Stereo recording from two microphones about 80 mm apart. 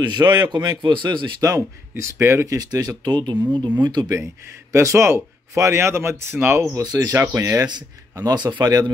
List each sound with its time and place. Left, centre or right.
0.0 s a man's voice: right
1.4 s speech: right
2.4 s a man's voice: right
4.7 s speech: right
6.8 s speech: right
7.6 s a man's voice: right